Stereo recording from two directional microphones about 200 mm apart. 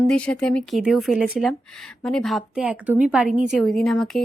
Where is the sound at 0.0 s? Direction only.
5° left (ahead or behind).